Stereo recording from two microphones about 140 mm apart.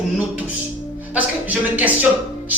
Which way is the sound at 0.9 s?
10° right (ahead or behind).